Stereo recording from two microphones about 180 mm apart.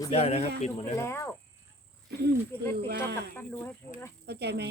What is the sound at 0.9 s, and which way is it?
Speech, 15° left (ahead or behind).